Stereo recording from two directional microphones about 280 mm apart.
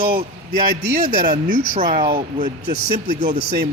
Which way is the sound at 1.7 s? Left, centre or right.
Right.